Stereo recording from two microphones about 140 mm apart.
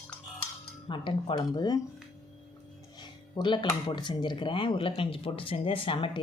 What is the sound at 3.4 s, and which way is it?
Speech, 35° left (ahead or behind).